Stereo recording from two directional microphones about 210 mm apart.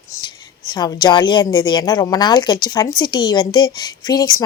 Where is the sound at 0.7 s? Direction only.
20° left (ahead or behind).